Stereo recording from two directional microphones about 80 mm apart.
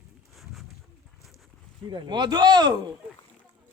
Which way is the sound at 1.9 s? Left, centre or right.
Right.